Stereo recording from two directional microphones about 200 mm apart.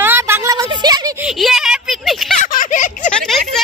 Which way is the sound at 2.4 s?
40° left (ahead or behind).